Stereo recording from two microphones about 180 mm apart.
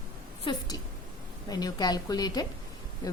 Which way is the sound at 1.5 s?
20° left (ahead or behind).